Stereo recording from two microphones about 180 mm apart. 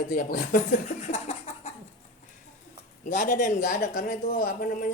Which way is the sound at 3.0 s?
45° left (ahead or behind).